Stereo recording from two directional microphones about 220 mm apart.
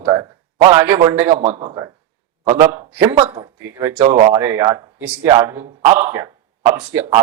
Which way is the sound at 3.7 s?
10° right (ahead or behind).